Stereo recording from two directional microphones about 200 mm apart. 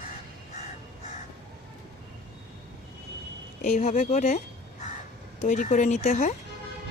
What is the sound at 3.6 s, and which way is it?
Speech, 40° left (ahead or behind).